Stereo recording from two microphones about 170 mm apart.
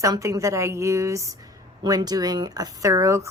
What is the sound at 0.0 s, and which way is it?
A woman's voice, 20° right (ahead or behind).